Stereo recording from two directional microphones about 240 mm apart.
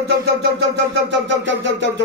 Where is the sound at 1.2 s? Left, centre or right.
Right.